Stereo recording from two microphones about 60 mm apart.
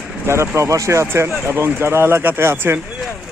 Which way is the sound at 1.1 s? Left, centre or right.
Right.